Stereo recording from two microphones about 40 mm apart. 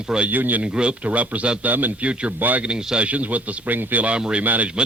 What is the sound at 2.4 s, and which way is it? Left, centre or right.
Speech, right.